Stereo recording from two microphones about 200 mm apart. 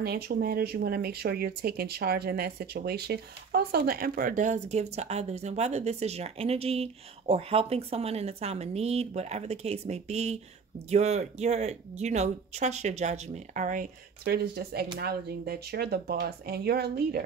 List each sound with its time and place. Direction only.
0.0 s speech: 50° right (ahead or behind)